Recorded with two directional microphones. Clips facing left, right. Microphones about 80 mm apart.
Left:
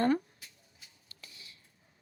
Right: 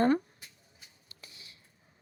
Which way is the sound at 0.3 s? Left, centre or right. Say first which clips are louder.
Right 1 dB; right.